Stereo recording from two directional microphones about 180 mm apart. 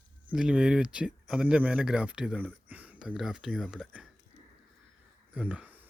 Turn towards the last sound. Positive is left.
turn(degrees=-10)  # may be behind; listen again after turning